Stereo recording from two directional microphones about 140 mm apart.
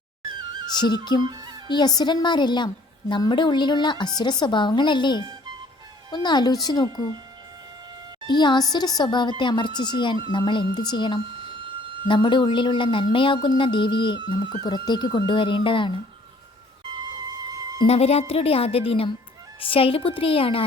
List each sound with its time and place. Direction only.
0.8 s a woman's voice: 30° left (ahead or behind)
1.2 s music: 30° right (ahead or behind)
1.6 s a woman's voice: 30° left (ahead or behind)
8.3 s a woman's voice: 30° left (ahead or behind)
17.8 s a woman's voice: 45° left (ahead or behind)